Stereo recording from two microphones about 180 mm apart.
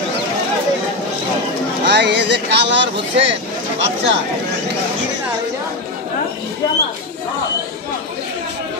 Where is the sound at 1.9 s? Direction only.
75° right (ahead or behind).